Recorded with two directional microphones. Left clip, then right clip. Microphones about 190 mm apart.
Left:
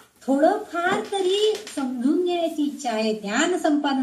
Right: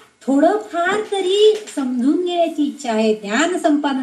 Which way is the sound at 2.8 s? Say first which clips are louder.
Right 8 dB; 20° right (ahead or behind).